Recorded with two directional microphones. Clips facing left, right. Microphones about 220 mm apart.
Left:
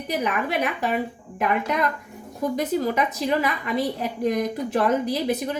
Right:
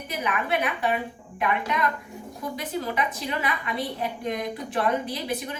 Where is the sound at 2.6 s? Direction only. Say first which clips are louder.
Left 5 dB; 40° left (ahead or behind).